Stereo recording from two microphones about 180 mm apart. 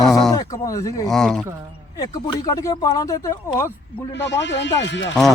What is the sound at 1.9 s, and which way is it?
Speech, 20° left (ahead or behind).